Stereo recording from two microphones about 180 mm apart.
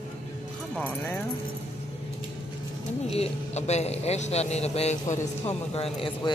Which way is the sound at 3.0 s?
35° left (ahead or behind).